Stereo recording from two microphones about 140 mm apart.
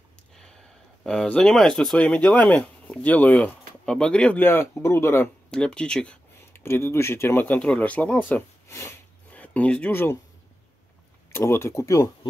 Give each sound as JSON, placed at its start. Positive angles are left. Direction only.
{"t": 1.0, "sound": "speech", "side_deg": 5}
{"t": 5.5, "sound": "speech", "side_deg": 5}
{"t": 6.5, "sound": "speech", "side_deg": 15}
{"t": 11.3, "sound": "speech", "side_deg": 15}